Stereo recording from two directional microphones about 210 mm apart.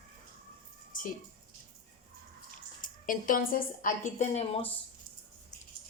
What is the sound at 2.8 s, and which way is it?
A woman's voice, 40° left (ahead or behind).